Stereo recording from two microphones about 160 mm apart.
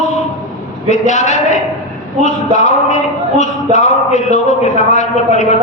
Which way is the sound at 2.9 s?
45° left (ahead or behind).